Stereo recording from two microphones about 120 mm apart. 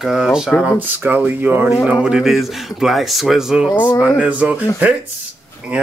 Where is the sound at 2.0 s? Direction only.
5° right (ahead or behind).